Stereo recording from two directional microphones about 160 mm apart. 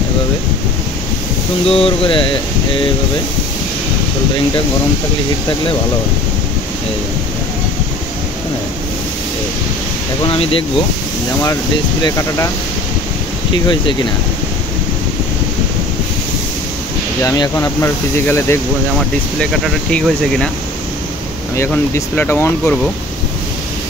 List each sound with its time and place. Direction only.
1.7 s a sound: 35° left (ahead or behind)
10.2 s a sound: 35° left (ahead or behind)
12.0 s speech: 20° left (ahead or behind)
17.2 s speech: 20° left (ahead or behind)
19.6 s speech: 5° left (ahead or behind)
21.5 s speech: 15° left (ahead or behind)